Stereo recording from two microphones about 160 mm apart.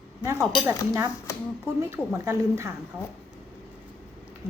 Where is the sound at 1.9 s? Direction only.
20° right (ahead or behind).